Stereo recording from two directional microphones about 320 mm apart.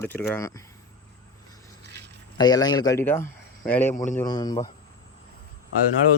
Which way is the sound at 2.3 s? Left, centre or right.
Centre.